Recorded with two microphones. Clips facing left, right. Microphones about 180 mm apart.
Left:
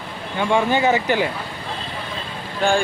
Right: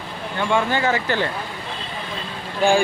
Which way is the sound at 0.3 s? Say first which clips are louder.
Left 2 dB; 15° left (ahead or behind).